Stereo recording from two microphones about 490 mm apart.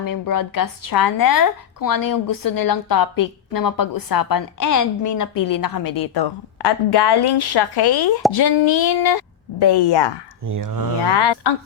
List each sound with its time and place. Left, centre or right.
0.0 s speech: left
10.4 s speech: right
11.0 s speech: left